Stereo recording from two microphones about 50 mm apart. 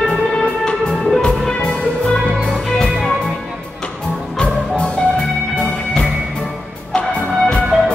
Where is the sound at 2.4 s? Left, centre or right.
Centre.